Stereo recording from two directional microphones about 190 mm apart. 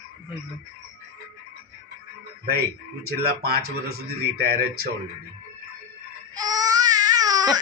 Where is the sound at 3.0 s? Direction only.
55° right (ahead or behind).